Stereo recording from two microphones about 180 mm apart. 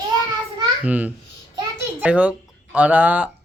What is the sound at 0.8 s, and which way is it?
A child's voice, 10° right (ahead or behind).